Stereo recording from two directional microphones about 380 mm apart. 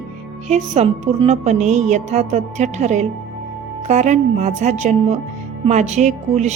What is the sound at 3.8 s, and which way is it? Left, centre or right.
Music, centre.